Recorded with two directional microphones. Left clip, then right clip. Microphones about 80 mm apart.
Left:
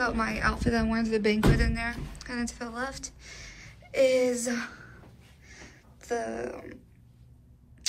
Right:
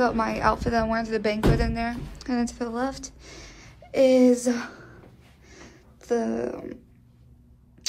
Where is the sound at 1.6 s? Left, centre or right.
Right.